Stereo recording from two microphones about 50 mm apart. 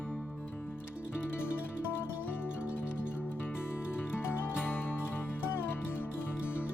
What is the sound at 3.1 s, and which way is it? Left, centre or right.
Music, left.